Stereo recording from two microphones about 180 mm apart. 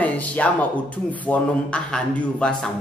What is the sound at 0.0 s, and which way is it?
A man's voice, 10° left (ahead or behind).